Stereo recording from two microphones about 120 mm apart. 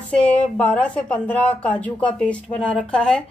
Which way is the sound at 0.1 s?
10° left (ahead or behind).